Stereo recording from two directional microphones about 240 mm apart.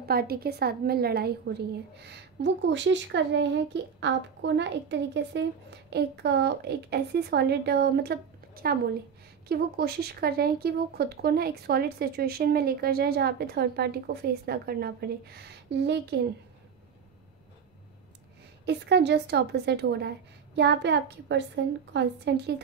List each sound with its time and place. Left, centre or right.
0.0 s a woman's voice: right
18.7 s a woman's voice: right